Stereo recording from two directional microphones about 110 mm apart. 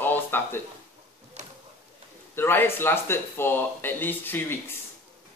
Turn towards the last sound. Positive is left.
turn(degrees=20)  # may be behind; listen again after turning